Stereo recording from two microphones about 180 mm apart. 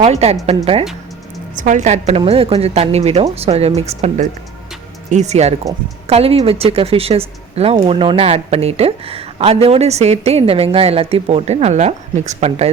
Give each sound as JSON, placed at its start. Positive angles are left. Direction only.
{"t": 0.0, "sound": "speech", "side_deg": -35}